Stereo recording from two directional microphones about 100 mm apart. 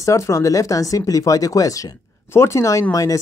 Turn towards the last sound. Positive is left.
turn(degrees=35)  # may be behind; listen again after turning